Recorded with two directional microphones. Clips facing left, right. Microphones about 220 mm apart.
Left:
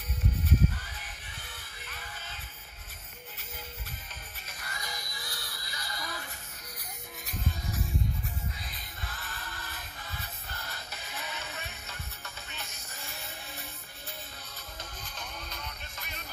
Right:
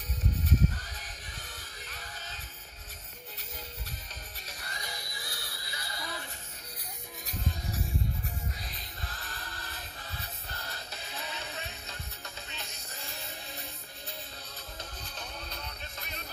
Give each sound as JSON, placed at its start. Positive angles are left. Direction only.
{"t": 0.5, "sound": "music", "side_deg": -40}
{"t": 4.5, "sound": "music", "side_deg": -35}
{"t": 8.5, "sound": "music", "side_deg": -40}
{"t": 15.1, "sound": "music", "side_deg": -35}